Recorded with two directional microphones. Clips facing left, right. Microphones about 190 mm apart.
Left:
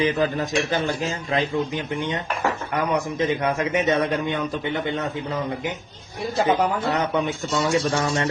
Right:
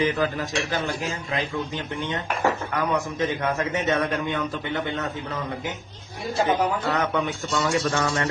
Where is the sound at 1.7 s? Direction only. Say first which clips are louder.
Left 3 dB; 15° left (ahead or behind).